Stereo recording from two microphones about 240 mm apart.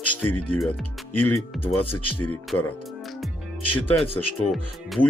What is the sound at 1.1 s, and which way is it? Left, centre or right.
Speech, left.